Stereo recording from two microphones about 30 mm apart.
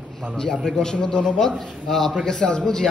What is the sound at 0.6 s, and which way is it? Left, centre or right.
Speech, left.